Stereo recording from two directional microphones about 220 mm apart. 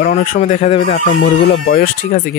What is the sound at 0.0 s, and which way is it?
Speech, 40° left (ahead or behind).